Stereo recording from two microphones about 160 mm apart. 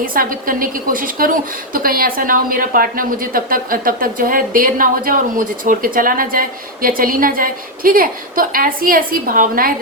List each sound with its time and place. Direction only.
0.0 s a woman's voice: 60° right (ahead or behind)